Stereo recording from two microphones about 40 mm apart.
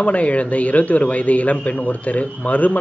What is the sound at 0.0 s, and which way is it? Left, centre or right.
A man's voice, left.